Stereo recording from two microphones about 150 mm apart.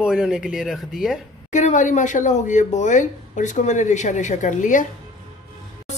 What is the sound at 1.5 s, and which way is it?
Speech, 55° left (ahead or behind).